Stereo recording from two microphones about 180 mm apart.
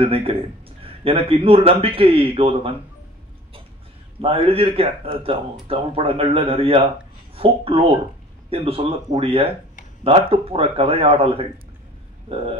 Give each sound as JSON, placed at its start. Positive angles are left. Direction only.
{"t": 0.0, "sound": "a man's voice", "side_deg": -30}
{"t": 4.2, "sound": "a man's voice", "side_deg": -30}